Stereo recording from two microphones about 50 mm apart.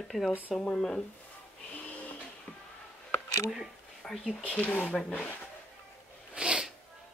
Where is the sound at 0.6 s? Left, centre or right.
Centre.